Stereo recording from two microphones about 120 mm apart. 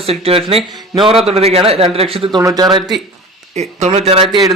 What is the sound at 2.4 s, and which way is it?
Speech, 30° right (ahead or behind).